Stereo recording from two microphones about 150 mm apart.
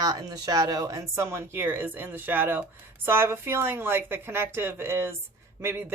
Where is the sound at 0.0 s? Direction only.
25° right (ahead or behind).